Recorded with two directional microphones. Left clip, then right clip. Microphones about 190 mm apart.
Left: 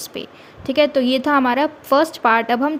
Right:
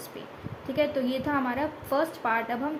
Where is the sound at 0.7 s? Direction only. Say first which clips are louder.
Left 11 dB; 45° left (ahead or behind).